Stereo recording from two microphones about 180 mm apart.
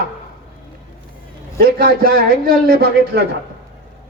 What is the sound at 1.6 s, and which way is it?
A man's voice, 55° right (ahead or behind).